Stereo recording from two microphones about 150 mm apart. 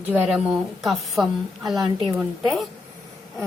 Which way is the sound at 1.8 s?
30° right (ahead or behind).